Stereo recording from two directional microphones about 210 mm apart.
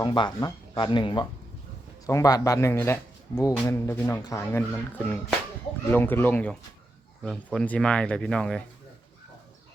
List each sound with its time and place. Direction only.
0.0 s a man's voice: 20° left (ahead or behind); by 8.6 s 5° left (ahead or behind)